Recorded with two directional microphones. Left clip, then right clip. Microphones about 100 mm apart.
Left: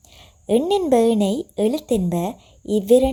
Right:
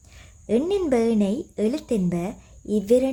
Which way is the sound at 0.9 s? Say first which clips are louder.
Left 5 dB; 40° left (ahead or behind).